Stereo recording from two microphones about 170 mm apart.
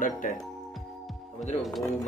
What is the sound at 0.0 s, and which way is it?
Speech, 50° left (ahead or behind).